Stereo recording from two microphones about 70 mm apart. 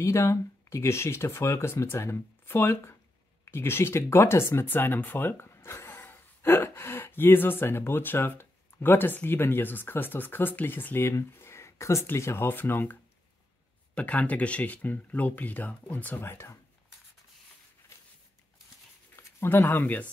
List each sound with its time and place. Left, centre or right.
0.0 s speech: left
16.2 s speech: left
19.1 s speech: left